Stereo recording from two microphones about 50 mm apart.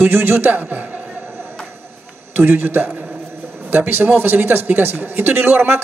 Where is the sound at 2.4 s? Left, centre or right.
Right.